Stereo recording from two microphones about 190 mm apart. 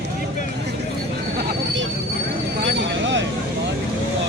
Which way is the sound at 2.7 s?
70° right (ahead or behind).